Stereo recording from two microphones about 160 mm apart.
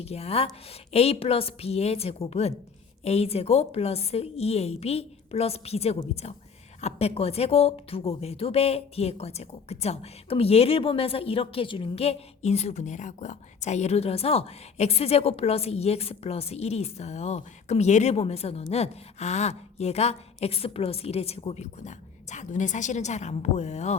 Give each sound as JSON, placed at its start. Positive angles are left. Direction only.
{"t": 0.0, "sound": "speech", "side_deg": 40}